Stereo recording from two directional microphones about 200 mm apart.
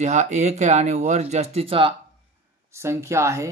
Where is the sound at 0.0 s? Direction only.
35° right (ahead or behind).